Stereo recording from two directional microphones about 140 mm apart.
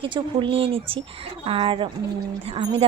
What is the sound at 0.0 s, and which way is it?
Speech, 35° right (ahead or behind).